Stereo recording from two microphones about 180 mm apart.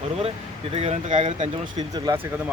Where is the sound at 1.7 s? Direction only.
20° right (ahead or behind).